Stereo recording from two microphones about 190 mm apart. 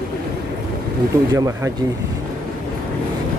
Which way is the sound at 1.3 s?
20° right (ahead or behind).